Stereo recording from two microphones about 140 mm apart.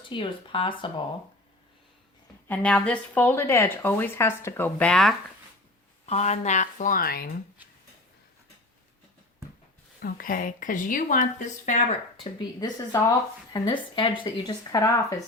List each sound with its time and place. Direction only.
0.1 s a woman's voice: 40° left (ahead or behind)
2.5 s speech: 5° left (ahead or behind)
6.1 s speech: 50° left (ahead or behind); by 7.3 s 90° left
10.0 s speech: 85° left; by 11.8 s 60° left (ahead or behind)
12.2 s a woman's voice: 30° left (ahead or behind)